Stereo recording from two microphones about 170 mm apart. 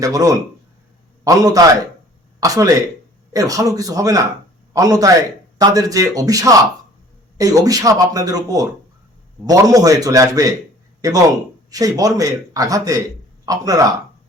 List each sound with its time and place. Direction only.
0.0 s a man's voice: 20° right (ahead or behind)